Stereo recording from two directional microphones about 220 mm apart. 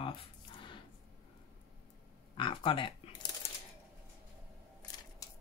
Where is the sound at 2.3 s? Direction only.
20° left (ahead or behind).